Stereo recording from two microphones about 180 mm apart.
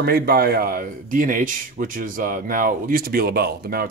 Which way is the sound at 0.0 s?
60° right (ahead or behind).